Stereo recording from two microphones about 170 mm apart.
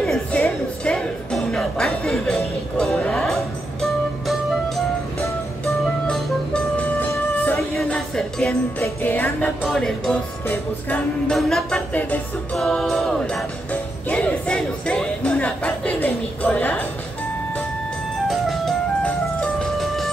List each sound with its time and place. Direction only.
0.0 s music: 5° left (ahead or behind)
18.3 s music: centre (ahead or behind)